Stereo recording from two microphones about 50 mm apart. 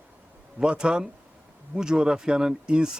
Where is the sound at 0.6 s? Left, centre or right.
Centre.